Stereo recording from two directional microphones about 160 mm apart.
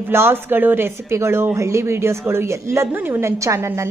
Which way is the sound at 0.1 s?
15° right (ahead or behind).